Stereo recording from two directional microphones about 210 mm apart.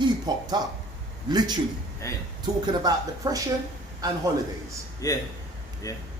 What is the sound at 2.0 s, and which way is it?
Speech, 15° left (ahead or behind).